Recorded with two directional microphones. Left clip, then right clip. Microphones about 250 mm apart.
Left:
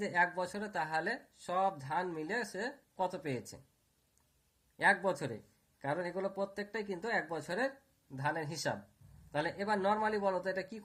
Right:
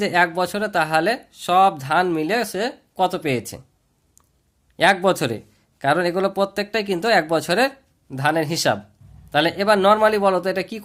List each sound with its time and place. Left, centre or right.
0.0 s speech: right
4.8 s speech: right